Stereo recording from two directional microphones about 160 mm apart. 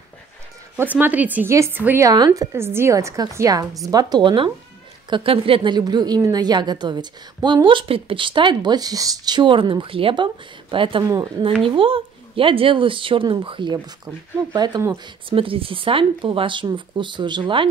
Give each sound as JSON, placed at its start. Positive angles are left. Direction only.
{"t": 0.9, "sound": "a woman's voice", "side_deg": -10}
{"t": 15.2, "sound": "speech", "side_deg": -35}